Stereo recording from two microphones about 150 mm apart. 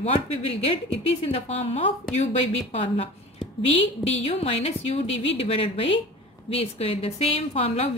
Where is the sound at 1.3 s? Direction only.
40° left (ahead or behind).